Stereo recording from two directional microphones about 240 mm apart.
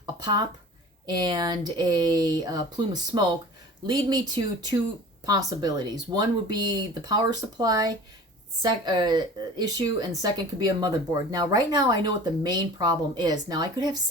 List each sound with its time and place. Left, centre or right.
0.0 s a sound: centre
1.0 s speech: centre
7.6 s speech: centre